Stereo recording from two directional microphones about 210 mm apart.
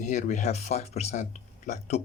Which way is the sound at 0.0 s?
35° left (ahead or behind).